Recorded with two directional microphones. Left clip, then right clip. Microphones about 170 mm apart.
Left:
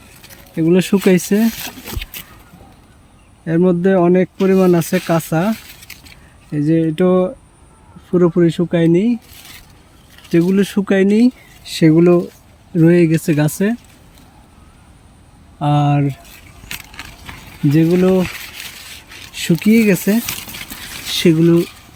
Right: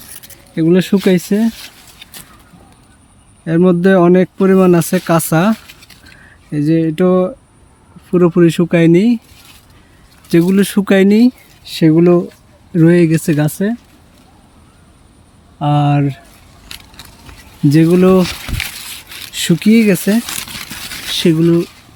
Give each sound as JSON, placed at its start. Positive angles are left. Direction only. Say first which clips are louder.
{"t": 0.5, "sound": "speech", "louder": "right 2 dB", "side_deg": -20}
{"t": 3.4, "sound": "speech", "louder": "right 3 dB", "side_deg": -20}
{"t": 10.2, "sound": "speech", "louder": "right 2 dB", "side_deg": -25}
{"t": 15.5, "sound": "speech", "louder": "right 2 dB", "side_deg": -15}
{"t": 17.7, "sound": "speech", "louder": "right 4 dB", "side_deg": -25}
{"t": 18.8, "sound": "a sound", "louder": "right 5 dB", "side_deg": -80}
{"t": 19.3, "sound": "speech", "louder": "right 2 dB", "side_deg": -20}